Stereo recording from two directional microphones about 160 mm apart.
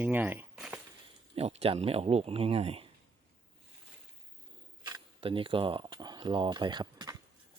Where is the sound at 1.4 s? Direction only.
40° right (ahead or behind).